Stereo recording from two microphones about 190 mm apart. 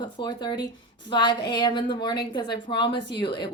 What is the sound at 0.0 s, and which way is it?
Speech, 25° left (ahead or behind).